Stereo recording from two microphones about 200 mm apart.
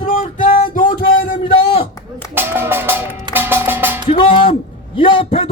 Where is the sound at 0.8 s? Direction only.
45° left (ahead or behind).